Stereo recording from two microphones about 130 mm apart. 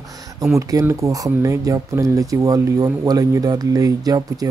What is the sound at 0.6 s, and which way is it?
Speech, 25° right (ahead or behind).